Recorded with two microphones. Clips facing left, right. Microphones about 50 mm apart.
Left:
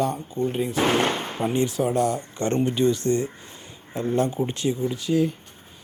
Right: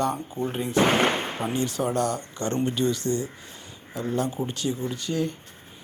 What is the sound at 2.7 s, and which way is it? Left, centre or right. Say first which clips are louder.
Speech: left 4 dB; left.